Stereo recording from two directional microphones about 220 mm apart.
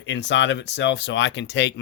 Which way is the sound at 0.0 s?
55° left (ahead or behind).